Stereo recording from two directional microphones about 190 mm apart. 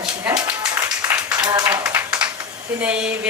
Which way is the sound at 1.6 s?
10° right (ahead or behind).